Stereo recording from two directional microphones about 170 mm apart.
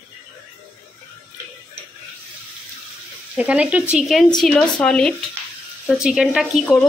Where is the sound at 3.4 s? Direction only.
10° right (ahead or behind).